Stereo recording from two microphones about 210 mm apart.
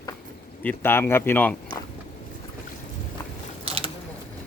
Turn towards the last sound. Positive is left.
turn(degrees=-25)  # may be behind; listen again after turning